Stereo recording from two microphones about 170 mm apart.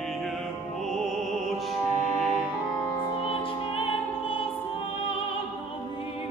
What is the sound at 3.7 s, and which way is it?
Music, 30° left (ahead or behind).